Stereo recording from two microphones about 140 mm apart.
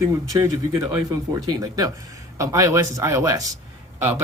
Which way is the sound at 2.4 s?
20° right (ahead or behind).